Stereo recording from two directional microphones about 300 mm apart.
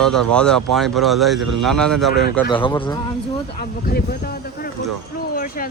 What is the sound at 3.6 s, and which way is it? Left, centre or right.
Speech, left.